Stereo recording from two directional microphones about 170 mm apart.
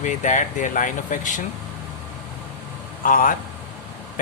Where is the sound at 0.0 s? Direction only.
45° left (ahead or behind).